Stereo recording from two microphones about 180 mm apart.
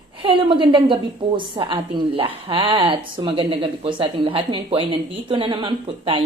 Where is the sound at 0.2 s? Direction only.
25° right (ahead or behind).